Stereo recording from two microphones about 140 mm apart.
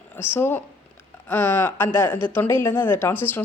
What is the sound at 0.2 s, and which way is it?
Speech, 15° left (ahead or behind).